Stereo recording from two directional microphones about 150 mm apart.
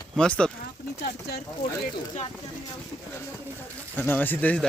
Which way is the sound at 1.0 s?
90° left.